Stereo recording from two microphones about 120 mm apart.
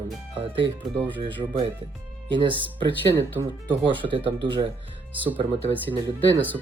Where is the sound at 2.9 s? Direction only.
15° left (ahead or behind).